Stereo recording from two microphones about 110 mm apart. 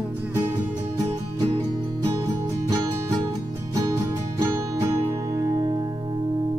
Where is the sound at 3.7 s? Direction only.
30° right (ahead or behind).